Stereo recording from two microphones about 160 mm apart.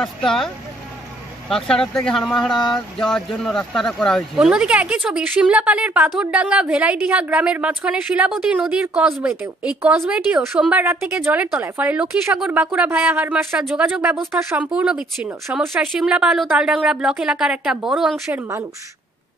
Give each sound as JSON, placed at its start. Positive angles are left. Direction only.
{"t": 0.0, "sound": "speech", "side_deg": 0}
{"t": 1.5, "sound": "speech", "side_deg": 5}
{"t": 18.3, "sound": "speech", "side_deg": -15}